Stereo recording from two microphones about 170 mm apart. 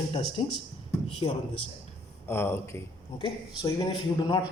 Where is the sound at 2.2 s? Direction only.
15° left (ahead or behind).